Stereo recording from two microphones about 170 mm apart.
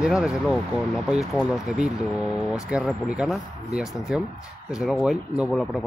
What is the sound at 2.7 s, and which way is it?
Speech, 5° right (ahead or behind).